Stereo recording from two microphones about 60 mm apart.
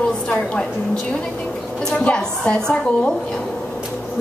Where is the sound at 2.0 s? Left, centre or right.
Centre.